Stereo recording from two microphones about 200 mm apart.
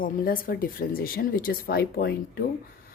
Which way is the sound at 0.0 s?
45° left (ahead or behind).